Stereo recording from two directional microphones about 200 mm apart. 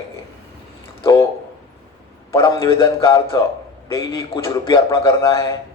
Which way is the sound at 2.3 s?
20° left (ahead or behind).